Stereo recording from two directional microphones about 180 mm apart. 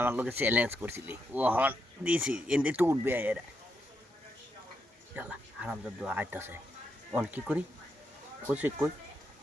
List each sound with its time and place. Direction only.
0.0 s speech: 10° right (ahead or behind)
5.1 s speech: 5° right (ahead or behind)